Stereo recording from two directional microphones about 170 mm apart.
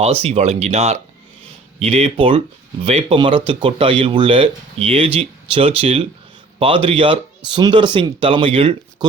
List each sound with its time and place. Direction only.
0.0 s speech: 35° right (ahead or behind)